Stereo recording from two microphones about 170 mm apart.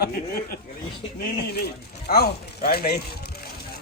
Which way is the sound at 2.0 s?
70° left (ahead or behind).